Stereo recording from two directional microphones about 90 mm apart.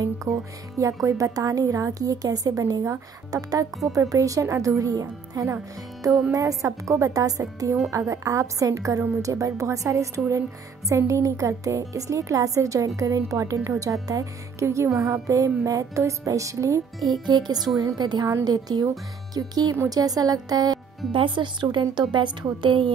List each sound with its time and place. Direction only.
0.0 s music: 40° right (ahead or behind)
1.0 s a woman's voice: 40° right (ahead or behind)
17.1 s a woman's voice: 50° right (ahead or behind)
21.1 s a woman's voice: 65° right (ahead or behind)